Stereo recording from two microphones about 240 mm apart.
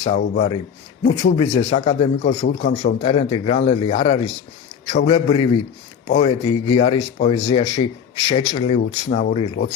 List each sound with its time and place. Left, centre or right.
0.0 s speech: left